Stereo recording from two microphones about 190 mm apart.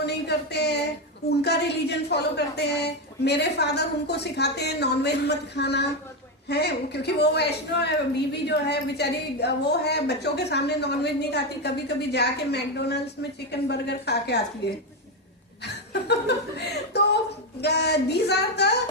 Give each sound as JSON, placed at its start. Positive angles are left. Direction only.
{"t": 0.0, "sound": "a sound", "side_deg": 60}
{"t": 1.4, "sound": "a woman's voice", "side_deg": 60}
{"t": 15.6, "sound": "a woman's voice", "side_deg": 60}